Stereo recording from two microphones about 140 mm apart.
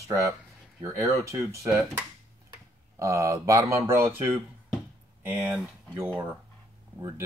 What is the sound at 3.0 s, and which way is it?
Speech, 20° right (ahead or behind).